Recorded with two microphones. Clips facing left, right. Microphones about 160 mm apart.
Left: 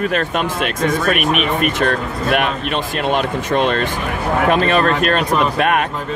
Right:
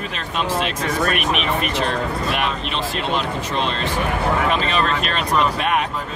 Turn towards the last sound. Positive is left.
turn(degrees=55)  # may be behind; listen again after turning